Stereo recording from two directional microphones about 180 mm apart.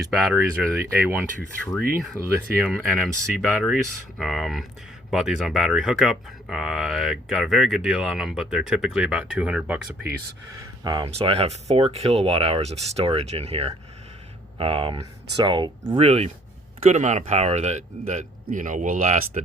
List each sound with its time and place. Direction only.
0.1 s speech: centre (ahead or behind)
0.8 s speech: 10° right (ahead or behind)
2.6 s speech: centre (ahead or behind)
10.8 s speech: 30° right (ahead or behind)